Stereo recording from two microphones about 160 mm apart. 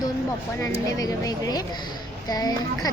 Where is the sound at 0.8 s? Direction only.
20° left (ahead or behind).